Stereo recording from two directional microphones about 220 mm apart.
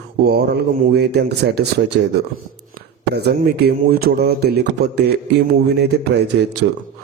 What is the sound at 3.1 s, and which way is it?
A man's voice, 45° right (ahead or behind).